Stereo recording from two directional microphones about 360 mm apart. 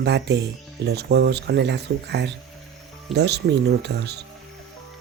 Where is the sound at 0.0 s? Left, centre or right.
Right.